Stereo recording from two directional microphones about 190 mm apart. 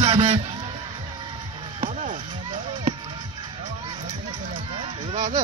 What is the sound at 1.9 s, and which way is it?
Chop, 40° right (ahead or behind).